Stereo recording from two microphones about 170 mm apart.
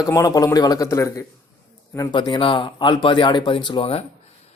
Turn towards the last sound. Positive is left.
turn(degrees=35)  # may be behind; listen again after turning